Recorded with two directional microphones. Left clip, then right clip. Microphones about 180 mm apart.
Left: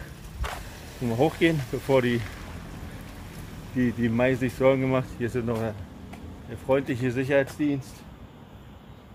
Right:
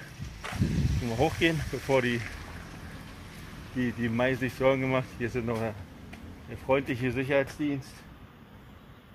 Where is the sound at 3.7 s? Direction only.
15° left (ahead or behind); by 7.8 s 5° right (ahead or behind).